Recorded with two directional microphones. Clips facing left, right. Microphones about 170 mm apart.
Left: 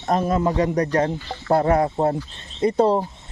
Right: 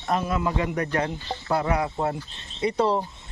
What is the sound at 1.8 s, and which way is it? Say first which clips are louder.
Speech: left 6 dB; 35° left (ahead or behind).